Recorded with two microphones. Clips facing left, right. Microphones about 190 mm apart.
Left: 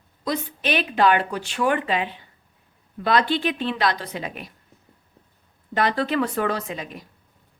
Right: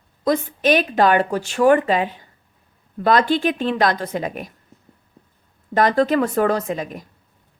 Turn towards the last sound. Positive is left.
turn(degrees=-45)  # may be behind; listen again after turning